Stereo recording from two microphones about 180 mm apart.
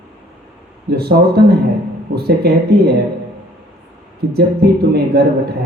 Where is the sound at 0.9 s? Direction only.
65° right (ahead or behind).